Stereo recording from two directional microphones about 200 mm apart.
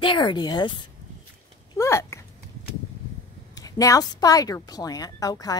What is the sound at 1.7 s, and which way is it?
Speech, 15° left (ahead or behind).